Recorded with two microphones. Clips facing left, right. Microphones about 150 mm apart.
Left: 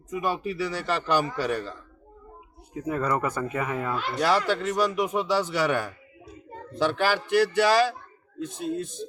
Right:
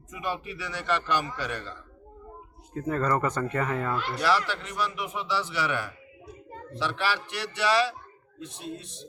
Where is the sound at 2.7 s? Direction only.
10° left (ahead or behind).